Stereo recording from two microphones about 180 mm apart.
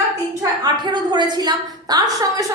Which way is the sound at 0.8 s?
25° right (ahead or behind).